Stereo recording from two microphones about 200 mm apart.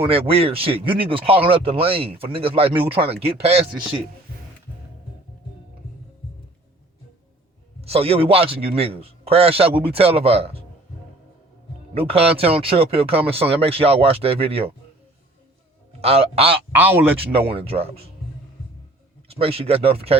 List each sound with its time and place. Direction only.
0.0 s speech: 30° right (ahead or behind)
7.8 s speech: 30° right (ahead or behind)
11.9 s speech: 30° right (ahead or behind)
16.0 s speech: 30° right (ahead or behind)
16.7 s speech: 10° right (ahead or behind)
17.3 s speech: 30° right (ahead or behind)
19.3 s speech: 30° right (ahead or behind)